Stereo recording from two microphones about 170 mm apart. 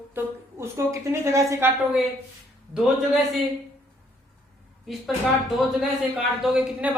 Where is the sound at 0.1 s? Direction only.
15° right (ahead or behind).